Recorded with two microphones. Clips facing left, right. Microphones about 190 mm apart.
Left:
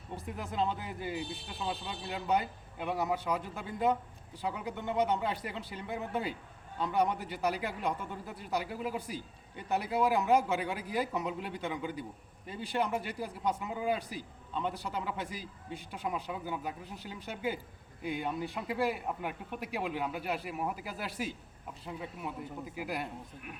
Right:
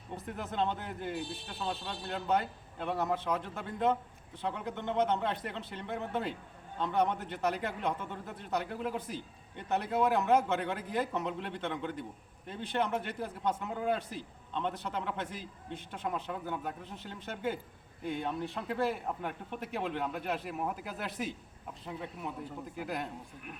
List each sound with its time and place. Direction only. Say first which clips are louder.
0.3 s a man's voice: even; centre (ahead or behind)